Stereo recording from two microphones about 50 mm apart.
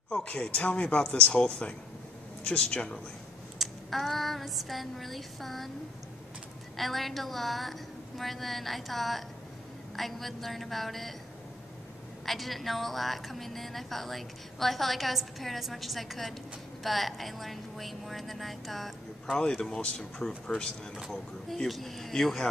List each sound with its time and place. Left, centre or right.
0.1 s speech: left
3.5 s a sound: centre
6.8 s a woman's voice: centre
12.3 s a woman's voice: centre
19.3 s a woman's voice: centre